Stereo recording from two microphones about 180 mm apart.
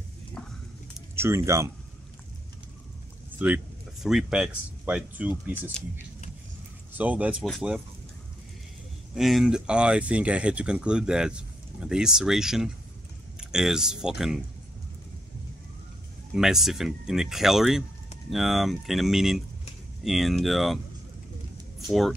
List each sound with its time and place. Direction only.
1.1 s speech: 15° right (ahead or behind)
3.3 s speech: 10° right (ahead or behind)
6.9 s speech: 10° right (ahead or behind)
9.1 s speech: centre (ahead or behind)
16.3 s speech: centre (ahead or behind)